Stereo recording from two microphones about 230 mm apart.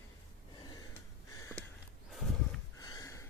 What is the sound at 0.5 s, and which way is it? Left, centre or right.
Gasp, centre.